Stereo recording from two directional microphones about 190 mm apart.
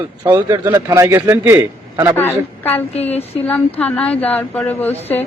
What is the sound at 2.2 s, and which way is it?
Speech, 10° left (ahead or behind).